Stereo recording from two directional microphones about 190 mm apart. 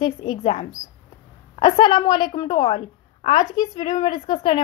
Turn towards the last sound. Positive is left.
turn(degrees=25)  # may be behind; listen again after turning